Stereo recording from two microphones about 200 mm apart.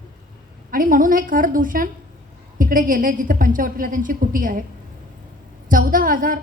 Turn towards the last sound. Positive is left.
turn(degrees=-45)  # may be behind; listen again after turning